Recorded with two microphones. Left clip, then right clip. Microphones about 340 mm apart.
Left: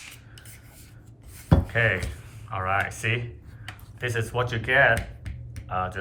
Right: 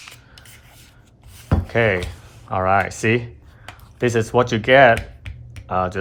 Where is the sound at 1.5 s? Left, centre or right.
Centre.